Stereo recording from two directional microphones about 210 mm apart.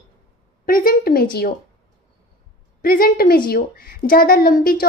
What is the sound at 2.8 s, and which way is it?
A woman's voice, 45° left (ahead or behind).